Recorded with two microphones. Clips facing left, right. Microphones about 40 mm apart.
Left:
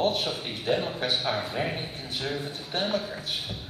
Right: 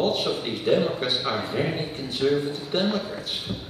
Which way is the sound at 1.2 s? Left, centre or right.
Centre.